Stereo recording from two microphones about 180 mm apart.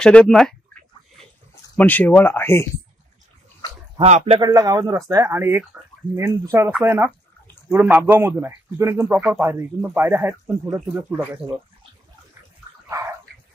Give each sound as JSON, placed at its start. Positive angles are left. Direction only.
{"t": 0.0, "sound": "speech", "side_deg": 5}
{"t": 4.0, "sound": "speech", "side_deg": -35}
{"t": 4.4, "sound": "speech", "side_deg": -20}
{"t": 12.9, "sound": "dog", "side_deg": -20}